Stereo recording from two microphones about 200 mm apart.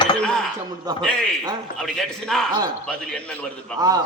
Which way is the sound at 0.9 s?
20° right (ahead or behind).